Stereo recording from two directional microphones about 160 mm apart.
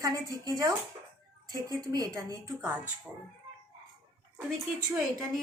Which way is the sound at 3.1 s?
5° right (ahead or behind).